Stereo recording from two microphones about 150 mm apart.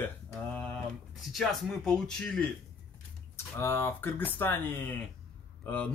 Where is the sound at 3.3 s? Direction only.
15° left (ahead or behind).